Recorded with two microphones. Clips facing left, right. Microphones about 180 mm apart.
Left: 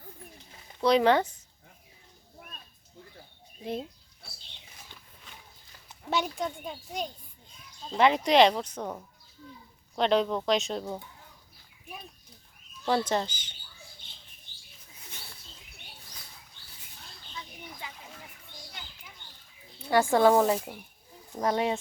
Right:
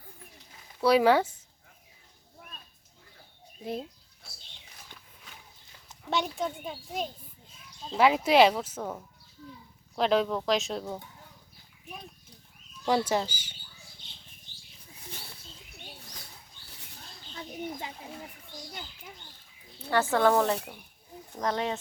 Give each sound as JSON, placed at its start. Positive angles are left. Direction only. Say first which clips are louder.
{"t": 0.8, "sound": "speech", "louder": "right 1 dB", "side_deg": -5}
{"t": 3.7, "sound": "goat", "louder": "left 1 dB", "side_deg": 0}
{"t": 6.1, "sound": "speech", "louder": "even", "side_deg": 0}
{"t": 12.8, "sound": "speech", "louder": "right 1 dB", "side_deg": -10}
{"t": 17.3, "sound": "bird", "louder": "right 8 dB", "side_deg": -45}
{"t": 17.8, "sound": "speech", "louder": "right 4 dB", "side_deg": -35}
{"t": 19.9, "sound": "speech", "louder": "left 3 dB", "side_deg": 10}